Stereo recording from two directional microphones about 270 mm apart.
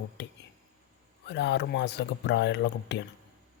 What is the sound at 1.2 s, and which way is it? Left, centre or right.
Speech, left.